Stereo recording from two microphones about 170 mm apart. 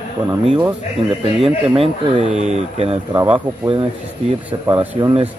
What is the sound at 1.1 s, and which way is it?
Speech, 35° right (ahead or behind).